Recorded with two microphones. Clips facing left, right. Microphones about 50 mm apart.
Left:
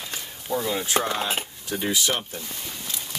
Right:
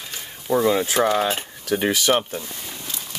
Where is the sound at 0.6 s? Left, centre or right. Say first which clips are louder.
Right 7 dB; right.